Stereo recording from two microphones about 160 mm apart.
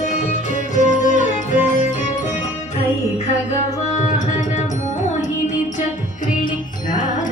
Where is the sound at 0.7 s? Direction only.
50° left (ahead or behind).